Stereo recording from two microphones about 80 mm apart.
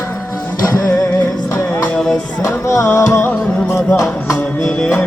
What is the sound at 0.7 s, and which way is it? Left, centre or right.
Music, left.